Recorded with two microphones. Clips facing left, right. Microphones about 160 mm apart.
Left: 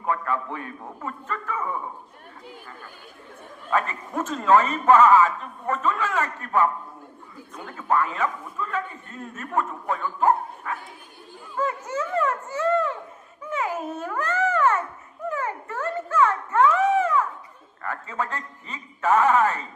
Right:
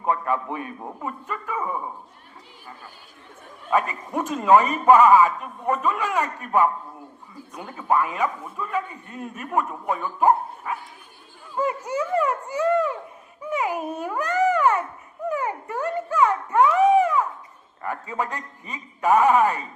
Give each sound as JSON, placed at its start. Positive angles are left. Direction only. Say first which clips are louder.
{"t": 0.0, "sound": "a man's voice", "louder": "right 2 dB", "side_deg": -20}
{"t": 3.7, "sound": "a man's voice", "louder": "right 2 dB", "side_deg": -15}